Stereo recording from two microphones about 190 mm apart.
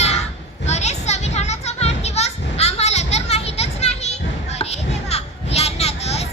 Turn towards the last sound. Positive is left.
turn(degrees=35)  # may be behind; listen again after turning